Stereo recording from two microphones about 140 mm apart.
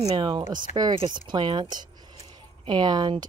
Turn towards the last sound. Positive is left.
turn(degrees=-30)  # may be behind; listen again after turning